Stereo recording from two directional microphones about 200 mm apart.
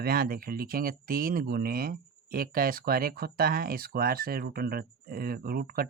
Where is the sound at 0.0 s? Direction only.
50° right (ahead or behind).